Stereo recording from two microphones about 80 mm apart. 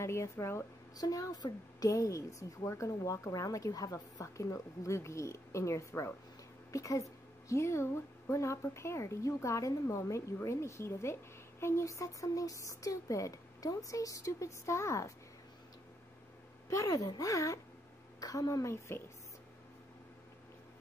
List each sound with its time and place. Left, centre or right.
0.0 s a woman's voice: left
0.9 s a woman's voice: left
16.6 s speech: left